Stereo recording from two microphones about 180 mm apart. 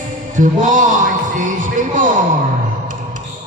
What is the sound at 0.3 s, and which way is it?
Music, 45° right (ahead or behind).